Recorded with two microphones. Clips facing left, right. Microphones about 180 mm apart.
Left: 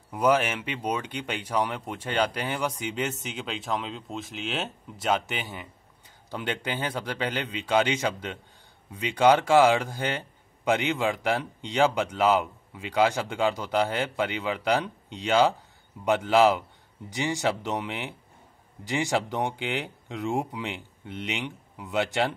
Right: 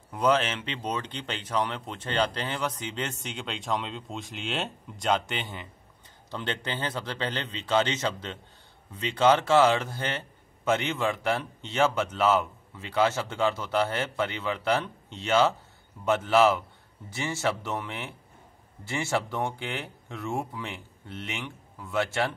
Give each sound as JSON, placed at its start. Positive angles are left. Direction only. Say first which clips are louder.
{"t": 0.1, "sound": "speech", "louder": "left 1 dB", "side_deg": 10}